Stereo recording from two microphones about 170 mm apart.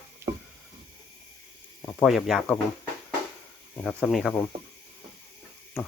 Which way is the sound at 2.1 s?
Centre (ahead or behind).